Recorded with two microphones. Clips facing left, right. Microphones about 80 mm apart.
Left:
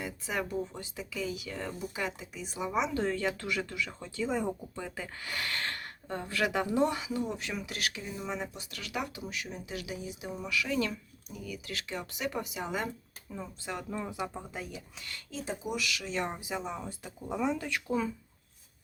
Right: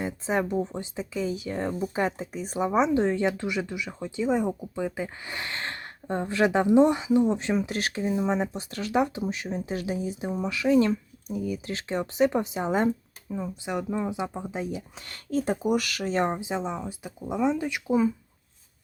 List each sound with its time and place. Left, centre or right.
0.0 s speech: right
2.9 s speech: right
13.3 s speech: centre
15.0 s speech: right; by 18.1 s centre